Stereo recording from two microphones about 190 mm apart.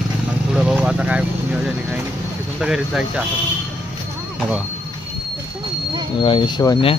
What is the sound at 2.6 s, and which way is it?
Speech, 5° right (ahead or behind).